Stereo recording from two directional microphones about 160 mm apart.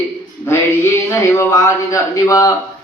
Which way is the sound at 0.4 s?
15° left (ahead or behind).